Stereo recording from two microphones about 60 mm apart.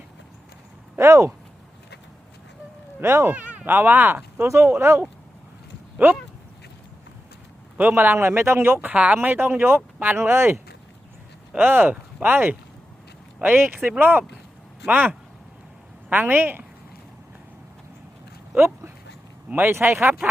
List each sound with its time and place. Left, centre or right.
0.9 s speech: right
3.0 s speech: right
3.3 s speech: right
4.4 s speech: right
6.0 s speech: right
7.8 s speech: right
11.5 s a woman's voice: right
18.5 s a sound: right
19.5 s speech: right